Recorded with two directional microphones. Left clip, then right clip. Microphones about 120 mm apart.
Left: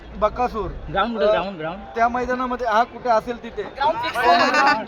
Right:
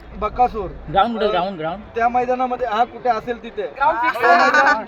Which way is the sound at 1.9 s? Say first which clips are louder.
Right 2 dB; 30° left (ahead or behind).